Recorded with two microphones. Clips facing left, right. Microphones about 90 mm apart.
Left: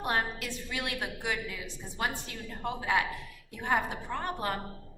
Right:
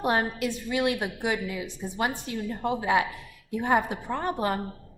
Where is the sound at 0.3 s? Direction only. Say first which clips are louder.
Right 9 dB; 20° right (ahead or behind).